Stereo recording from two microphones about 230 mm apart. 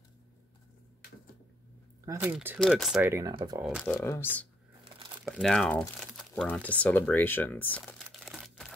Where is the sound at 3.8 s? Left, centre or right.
Centre.